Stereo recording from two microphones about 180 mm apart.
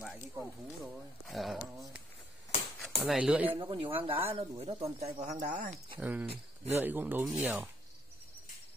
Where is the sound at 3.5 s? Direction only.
30° right (ahead or behind); by 5.8 s 45° right (ahead or behind).